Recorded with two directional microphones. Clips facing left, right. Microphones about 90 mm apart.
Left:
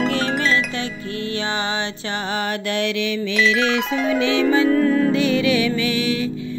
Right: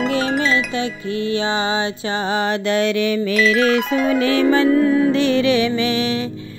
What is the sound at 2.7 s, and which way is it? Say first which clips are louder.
Music: right 5 dB; 35° right (ahead or behind).